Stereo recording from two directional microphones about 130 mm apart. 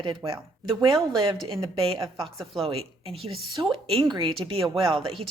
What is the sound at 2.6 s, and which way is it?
A woman's voice, 45° right (ahead or behind).